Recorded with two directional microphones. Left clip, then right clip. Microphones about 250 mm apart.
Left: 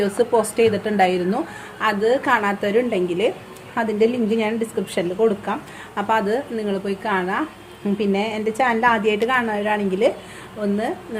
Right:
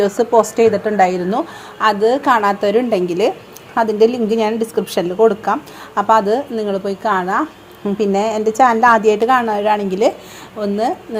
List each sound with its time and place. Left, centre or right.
0.0 s a woman's voice: centre